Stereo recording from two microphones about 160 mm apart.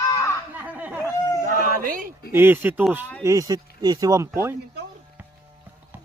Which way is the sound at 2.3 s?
15° right (ahead or behind).